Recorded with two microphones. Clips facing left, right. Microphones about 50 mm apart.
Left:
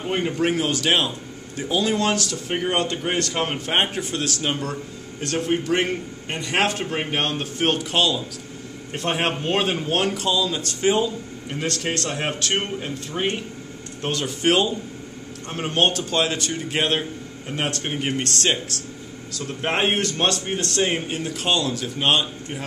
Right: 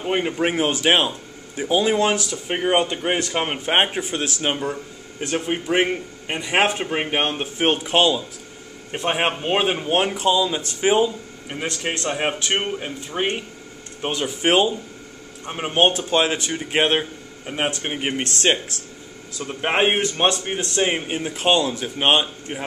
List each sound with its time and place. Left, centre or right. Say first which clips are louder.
0.0 s a man's voice: right 1 dB; centre